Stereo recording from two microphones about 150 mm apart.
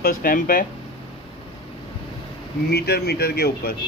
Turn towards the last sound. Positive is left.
turn(degrees=90)